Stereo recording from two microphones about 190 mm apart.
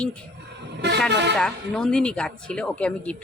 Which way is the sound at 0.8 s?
65° right (ahead or behind).